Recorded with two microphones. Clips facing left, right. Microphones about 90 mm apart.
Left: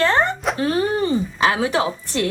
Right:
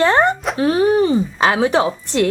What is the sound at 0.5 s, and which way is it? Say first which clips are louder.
Speech: right 7 dB; 20° right (ahead or behind).